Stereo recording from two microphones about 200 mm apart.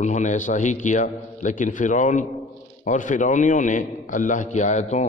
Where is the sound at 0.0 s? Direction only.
35° left (ahead or behind).